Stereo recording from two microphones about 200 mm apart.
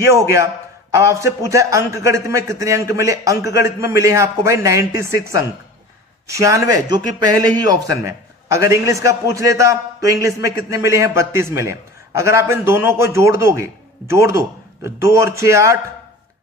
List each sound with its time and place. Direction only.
0.0 s a man's voice: 15° right (ahead or behind)
6.2 s a man's voice: 15° right (ahead or behind)